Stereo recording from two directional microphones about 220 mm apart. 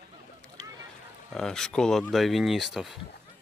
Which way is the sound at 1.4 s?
Centre (ahead or behind).